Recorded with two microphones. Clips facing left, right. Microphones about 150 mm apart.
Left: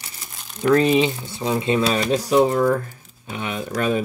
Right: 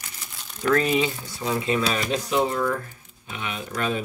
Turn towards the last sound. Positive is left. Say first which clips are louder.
# left 5 dB
turn(degrees=35)  # may be behind; listen again after turning